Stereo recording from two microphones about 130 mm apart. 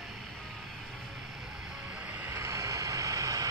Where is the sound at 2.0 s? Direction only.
10° right (ahead or behind).